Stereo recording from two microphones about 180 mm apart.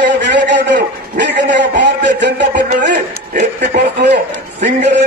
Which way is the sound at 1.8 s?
75° right (ahead or behind).